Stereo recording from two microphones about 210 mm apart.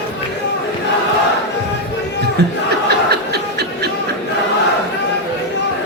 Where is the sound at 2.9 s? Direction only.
50° right (ahead or behind).